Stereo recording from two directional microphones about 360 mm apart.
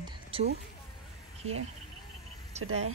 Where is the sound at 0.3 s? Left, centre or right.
Centre.